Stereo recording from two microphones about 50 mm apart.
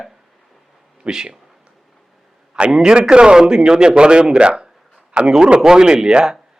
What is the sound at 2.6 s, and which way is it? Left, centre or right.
A man's voice, centre.